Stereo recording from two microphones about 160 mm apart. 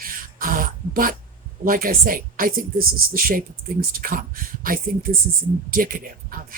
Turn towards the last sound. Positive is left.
turn(degrees=-60)  # may be behind; listen again after turning